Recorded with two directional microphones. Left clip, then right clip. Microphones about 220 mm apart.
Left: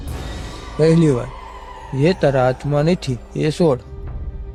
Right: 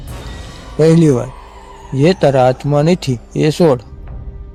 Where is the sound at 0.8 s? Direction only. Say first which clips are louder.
Right 4 dB; 20° right (ahead or behind).